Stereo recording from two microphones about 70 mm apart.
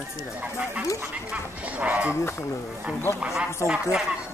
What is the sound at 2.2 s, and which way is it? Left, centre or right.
Speech, left.